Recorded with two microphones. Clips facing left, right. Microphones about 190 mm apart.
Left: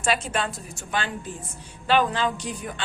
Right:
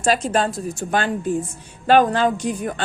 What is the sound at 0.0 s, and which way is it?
Speech, 35° right (ahead or behind).